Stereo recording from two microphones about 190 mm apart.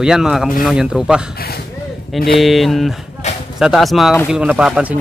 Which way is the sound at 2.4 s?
Centre (ahead or behind).